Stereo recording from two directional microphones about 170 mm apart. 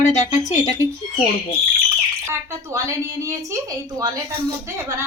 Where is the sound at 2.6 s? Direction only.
20° right (ahead or behind).